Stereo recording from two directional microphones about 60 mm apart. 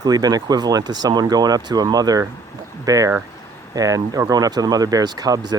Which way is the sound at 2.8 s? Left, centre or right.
Right.